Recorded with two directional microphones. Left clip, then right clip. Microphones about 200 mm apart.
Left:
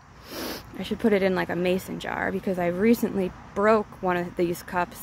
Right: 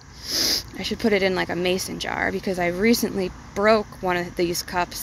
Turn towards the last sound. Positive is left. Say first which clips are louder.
# right 2 dB
turn(degrees=5)  # may be behind; listen again after turning